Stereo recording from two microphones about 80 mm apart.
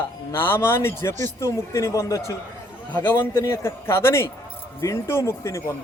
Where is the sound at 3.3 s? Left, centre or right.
Left.